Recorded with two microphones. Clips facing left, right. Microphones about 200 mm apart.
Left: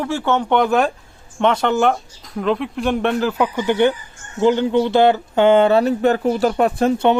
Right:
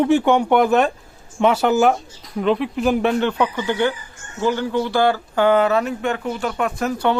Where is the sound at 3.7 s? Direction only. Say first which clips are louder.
Left 4 dB; 20° left (ahead or behind).